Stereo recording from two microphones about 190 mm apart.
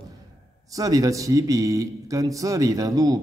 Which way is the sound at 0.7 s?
20° right (ahead or behind).